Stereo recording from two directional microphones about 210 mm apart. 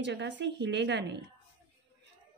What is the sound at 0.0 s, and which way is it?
Speech, 55° right (ahead or behind).